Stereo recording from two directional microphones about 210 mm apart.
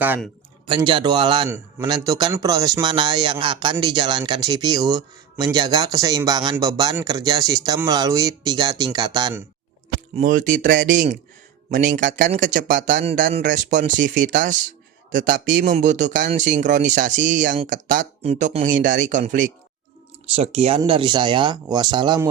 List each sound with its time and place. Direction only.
0.7 s speech: 20° right (ahead or behind)
10.2 s speech: 40° right (ahead or behind); by 22.3 s 20° right (ahead or behind)